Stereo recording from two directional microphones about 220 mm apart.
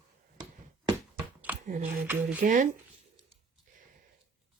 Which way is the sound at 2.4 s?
35° right (ahead or behind).